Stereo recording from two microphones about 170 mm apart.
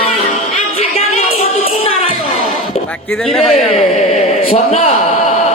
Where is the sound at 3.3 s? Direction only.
Centre (ahead or behind).